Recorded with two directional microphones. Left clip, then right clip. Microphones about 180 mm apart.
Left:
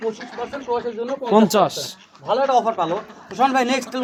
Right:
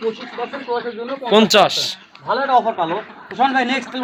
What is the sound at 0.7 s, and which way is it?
Speech, 10° left (ahead or behind).